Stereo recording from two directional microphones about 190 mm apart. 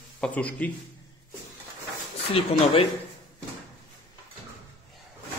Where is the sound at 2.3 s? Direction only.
30° left (ahead or behind).